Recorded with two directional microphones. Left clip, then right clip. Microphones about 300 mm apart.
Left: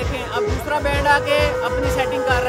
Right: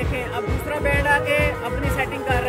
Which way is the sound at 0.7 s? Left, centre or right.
Centre.